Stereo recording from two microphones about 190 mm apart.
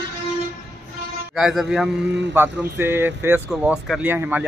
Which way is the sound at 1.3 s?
Centre (ahead or behind).